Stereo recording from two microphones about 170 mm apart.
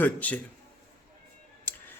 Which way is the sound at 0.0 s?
10° left (ahead or behind).